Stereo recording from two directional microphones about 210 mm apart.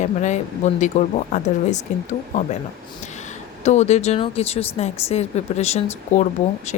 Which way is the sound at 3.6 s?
35° left (ahead or behind).